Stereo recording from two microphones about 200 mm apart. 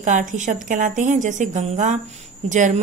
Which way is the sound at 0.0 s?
40° right (ahead or behind).